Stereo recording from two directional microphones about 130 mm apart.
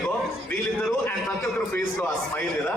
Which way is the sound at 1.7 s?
15° left (ahead or behind).